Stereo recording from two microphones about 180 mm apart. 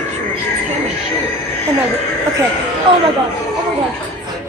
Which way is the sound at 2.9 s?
25° right (ahead or behind).